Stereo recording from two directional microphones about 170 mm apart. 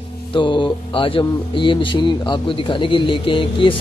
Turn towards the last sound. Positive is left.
turn(degrees=30)  # may be behind; listen again after turning